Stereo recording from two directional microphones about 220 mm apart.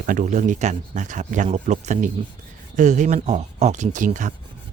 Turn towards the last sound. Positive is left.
turn(degrees=-35)  # may be behind; listen again after turning